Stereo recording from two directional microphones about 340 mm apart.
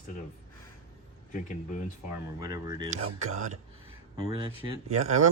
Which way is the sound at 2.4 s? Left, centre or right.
Centre.